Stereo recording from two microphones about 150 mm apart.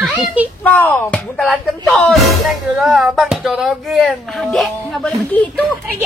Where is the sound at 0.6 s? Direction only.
10° left (ahead or behind).